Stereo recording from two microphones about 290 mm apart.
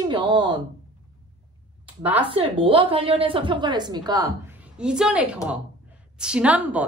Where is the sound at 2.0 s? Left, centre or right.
Centre.